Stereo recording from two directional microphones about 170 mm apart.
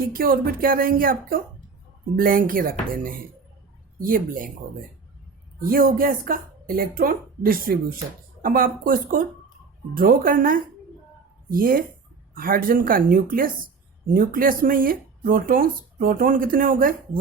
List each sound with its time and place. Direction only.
0.1 s speech: 60° right (ahead or behind)
5.5 s speech: 60° right (ahead or behind)